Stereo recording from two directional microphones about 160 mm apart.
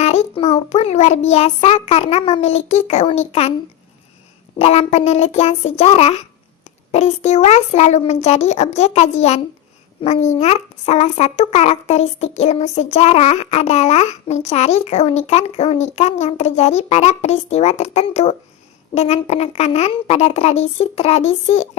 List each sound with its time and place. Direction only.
0.0 s child singing: 45° left (ahead or behind)
4.5 s a child's voice: 40° left (ahead or behind)
18.9 s child singing: 45° left (ahead or behind)